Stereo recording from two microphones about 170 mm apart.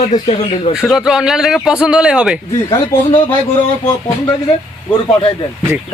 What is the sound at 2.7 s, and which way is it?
Speech, 30° left (ahead or behind).